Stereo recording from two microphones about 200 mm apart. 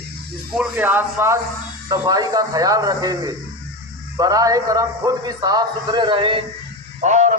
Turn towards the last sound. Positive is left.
turn(degrees=-35)  # may be behind; listen again after turning